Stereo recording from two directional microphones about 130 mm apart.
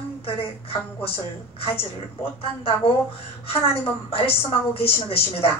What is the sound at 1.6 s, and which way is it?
A woman's voice, 50° left (ahead or behind).